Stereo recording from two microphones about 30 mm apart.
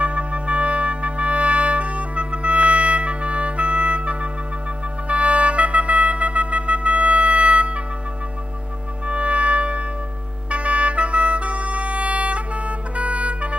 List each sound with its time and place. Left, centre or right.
0.0 s music: right
5.0 s wind instrument: right
9.0 s music: right